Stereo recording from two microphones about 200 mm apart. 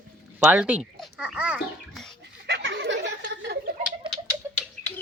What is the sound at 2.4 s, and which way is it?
Snicker, 60° right (ahead or behind).